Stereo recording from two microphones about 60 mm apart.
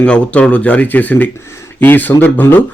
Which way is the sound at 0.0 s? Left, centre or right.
Centre.